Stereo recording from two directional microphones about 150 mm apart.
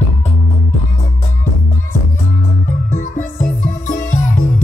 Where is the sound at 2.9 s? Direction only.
55° left (ahead or behind).